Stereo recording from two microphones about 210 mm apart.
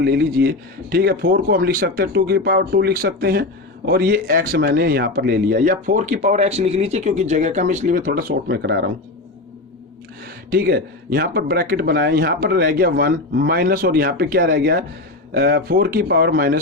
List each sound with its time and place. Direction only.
0.0 s speech: 50° right (ahead or behind)
10.5 s speech: 45° right (ahead or behind)